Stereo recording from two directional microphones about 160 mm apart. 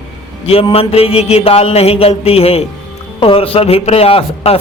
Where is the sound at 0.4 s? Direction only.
35° left (ahead or behind).